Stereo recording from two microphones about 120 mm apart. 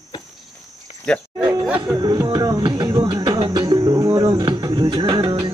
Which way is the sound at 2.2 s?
35° right (ahead or behind).